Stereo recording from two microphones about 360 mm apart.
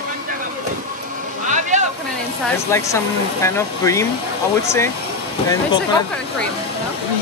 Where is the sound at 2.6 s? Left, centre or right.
Centre.